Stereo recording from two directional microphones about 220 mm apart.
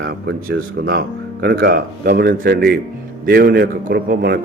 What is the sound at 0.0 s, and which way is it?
A man's voice, 45° right (ahead or behind).